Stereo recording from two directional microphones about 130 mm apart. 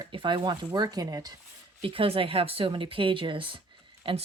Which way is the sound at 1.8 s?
45° right (ahead or behind).